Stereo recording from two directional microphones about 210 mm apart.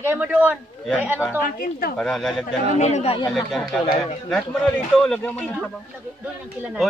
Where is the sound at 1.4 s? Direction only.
45° left (ahead or behind).